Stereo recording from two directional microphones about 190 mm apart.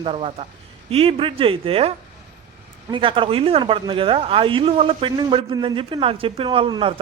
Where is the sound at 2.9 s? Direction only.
25° right (ahead or behind).